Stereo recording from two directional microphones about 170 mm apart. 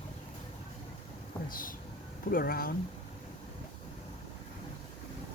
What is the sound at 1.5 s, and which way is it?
Speech, 55° left (ahead or behind).